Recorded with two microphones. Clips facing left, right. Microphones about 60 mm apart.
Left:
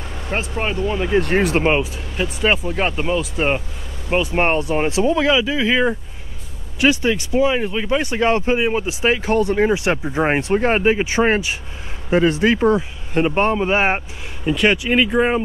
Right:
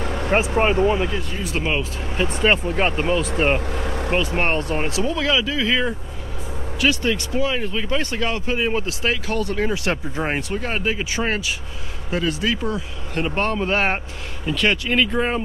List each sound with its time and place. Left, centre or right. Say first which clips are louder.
0.0 s vehicle: right 7 dB; right
1.2 s speech: left 12 dB; left
1.5 s speech: left 7 dB; left
2.4 s speech: even; centre
3.7 s vehicle: right 10 dB; right
4.4 s speech: left 4 dB; centre
8.2 s speech: left 7 dB; left
8.5 s speech: left 3 dB; centre; by 12.8 s left
13.1 s speech: left 5 dB; left